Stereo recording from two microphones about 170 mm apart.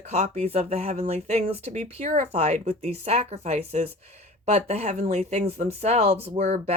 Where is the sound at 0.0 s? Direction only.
40° right (ahead or behind).